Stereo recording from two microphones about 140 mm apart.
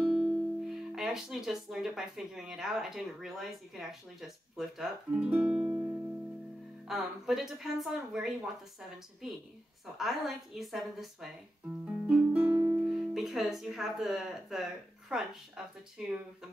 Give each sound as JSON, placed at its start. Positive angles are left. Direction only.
{"t": 0.0, "sound": "speech", "side_deg": 0}
{"t": 6.9, "sound": "speech", "side_deg": 0}
{"t": 9.9, "sound": "speech", "side_deg": 0}
{"t": 11.8, "sound": "music", "side_deg": -5}
{"t": 12.5, "sound": "music", "side_deg": -20}
{"t": 12.8, "sound": "speech", "side_deg": -5}